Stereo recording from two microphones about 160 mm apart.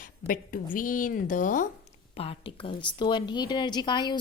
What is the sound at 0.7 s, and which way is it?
Speech, 60° left (ahead or behind).